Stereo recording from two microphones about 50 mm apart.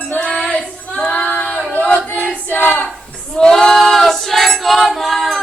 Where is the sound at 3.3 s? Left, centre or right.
Centre.